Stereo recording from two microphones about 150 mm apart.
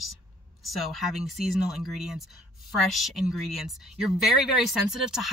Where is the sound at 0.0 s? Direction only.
Centre (ahead or behind).